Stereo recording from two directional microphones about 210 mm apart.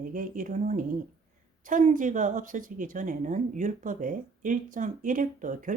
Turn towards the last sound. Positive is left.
turn(degrees=-40)  # may be behind; listen again after turning